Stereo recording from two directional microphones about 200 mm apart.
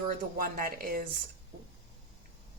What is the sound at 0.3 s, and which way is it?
Speech, 45° right (ahead or behind).